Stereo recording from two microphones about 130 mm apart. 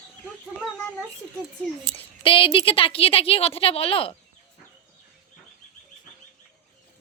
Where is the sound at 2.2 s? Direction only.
45° left (ahead or behind).